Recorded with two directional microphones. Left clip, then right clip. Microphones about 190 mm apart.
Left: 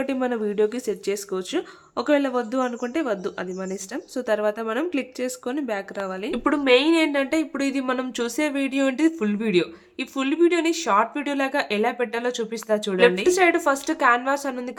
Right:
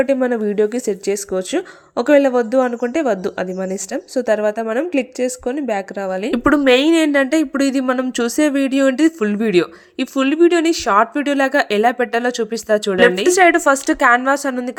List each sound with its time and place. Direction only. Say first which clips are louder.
0.0 s speech: right 8 dB; 20° right (ahead or behind)